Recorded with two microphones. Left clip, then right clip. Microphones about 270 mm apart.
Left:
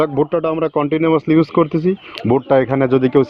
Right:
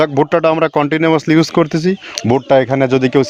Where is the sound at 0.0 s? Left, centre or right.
Right.